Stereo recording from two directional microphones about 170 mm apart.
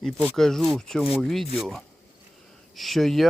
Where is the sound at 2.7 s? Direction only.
Centre (ahead or behind).